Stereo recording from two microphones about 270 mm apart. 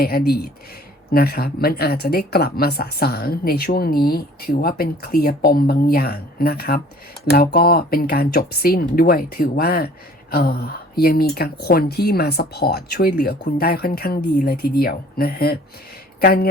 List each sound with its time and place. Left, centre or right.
0.0 s speech: left